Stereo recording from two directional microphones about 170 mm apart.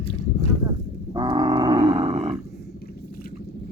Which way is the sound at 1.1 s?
25° right (ahead or behind).